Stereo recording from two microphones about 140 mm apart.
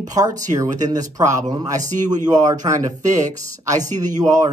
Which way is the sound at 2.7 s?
65° right (ahead or behind).